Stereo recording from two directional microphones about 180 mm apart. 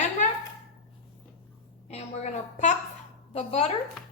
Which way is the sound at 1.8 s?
40° left (ahead or behind).